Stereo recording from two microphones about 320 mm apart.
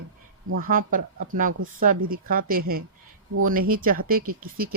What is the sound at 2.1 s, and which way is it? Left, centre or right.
Speech, right.